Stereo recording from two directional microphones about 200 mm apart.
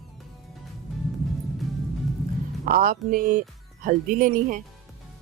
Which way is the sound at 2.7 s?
45° right (ahead or behind).